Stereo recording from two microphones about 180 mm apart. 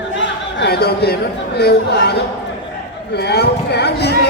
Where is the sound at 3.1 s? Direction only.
65° left (ahead or behind).